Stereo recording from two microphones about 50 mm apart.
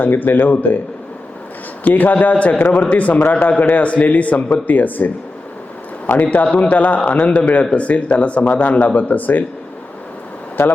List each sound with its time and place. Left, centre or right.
0.0 s speech: left
1.8 s speech: left
6.2 s speech: left
10.6 s speech: left